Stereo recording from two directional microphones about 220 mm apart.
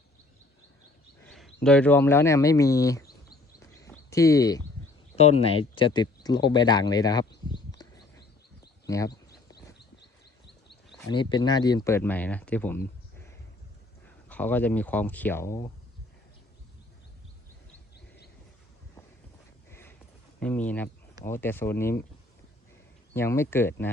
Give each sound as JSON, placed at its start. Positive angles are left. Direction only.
{"t": 1.2, "sound": "a sound", "side_deg": 0}
{"t": 1.6, "sound": "speech", "side_deg": 5}
{"t": 3.6, "sound": "a sound", "side_deg": 15}
{"t": 5.1, "sound": "speech", "side_deg": 30}
{"t": 11.1, "sound": "speech", "side_deg": 20}
{"t": 14.3, "sound": "speech", "side_deg": 5}
{"t": 19.7, "sound": "a sound", "side_deg": 10}
{"t": 20.4, "sound": "speech", "side_deg": 5}
{"t": 23.1, "sound": "speech", "side_deg": 10}